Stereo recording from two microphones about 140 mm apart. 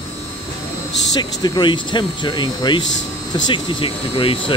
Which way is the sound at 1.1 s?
30° left (ahead or behind).